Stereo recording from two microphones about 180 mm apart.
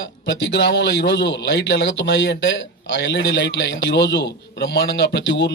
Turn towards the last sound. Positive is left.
turn(degrees=70)  # may be behind; listen again after turning